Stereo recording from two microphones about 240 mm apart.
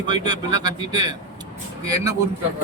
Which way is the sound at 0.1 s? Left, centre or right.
Centre.